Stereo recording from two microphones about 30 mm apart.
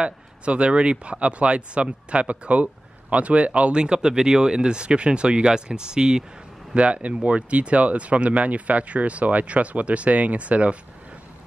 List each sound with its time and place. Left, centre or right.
0.0 s speech: right
3.7 s speech: right
6.7 s speech: right